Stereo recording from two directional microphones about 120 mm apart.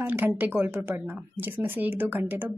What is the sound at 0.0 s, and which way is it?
A woman's voice, 15° right (ahead or behind).